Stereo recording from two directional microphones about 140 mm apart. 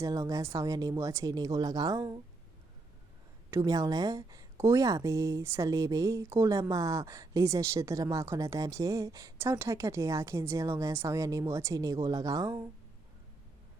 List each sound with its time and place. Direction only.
0.0 s a woman's voice: 25° right (ahead or behind)
3.5 s a woman's voice: 25° right (ahead or behind)